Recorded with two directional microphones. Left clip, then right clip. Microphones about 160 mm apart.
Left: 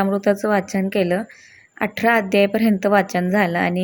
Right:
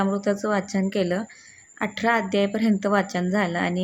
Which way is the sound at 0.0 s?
20° left (ahead or behind).